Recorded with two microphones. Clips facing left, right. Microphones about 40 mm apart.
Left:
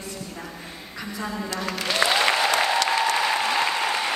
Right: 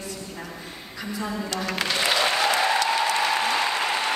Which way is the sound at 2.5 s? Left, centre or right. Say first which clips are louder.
Even; left.